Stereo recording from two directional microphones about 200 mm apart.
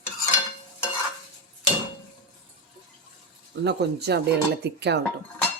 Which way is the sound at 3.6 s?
60° right (ahead or behind).